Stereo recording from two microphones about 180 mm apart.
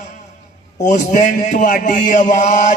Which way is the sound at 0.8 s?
45° left (ahead or behind).